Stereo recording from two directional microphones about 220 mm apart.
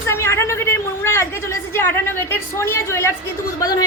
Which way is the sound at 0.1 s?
10° left (ahead or behind).